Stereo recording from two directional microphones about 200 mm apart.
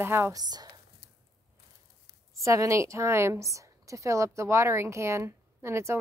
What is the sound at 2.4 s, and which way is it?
A woman's voice, 15° right (ahead or behind).